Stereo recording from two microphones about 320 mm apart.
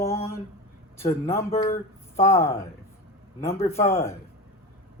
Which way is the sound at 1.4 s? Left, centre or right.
Left.